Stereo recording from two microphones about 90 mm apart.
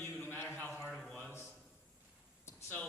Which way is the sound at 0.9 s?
5° left (ahead or behind).